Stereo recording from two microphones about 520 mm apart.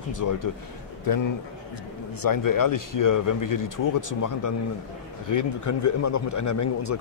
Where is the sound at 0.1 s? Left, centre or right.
Left.